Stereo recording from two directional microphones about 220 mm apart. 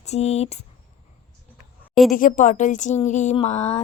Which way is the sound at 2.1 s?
35° left (ahead or behind).